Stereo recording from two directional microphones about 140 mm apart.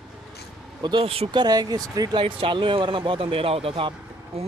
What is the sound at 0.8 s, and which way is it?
Speech, 40° right (ahead or behind).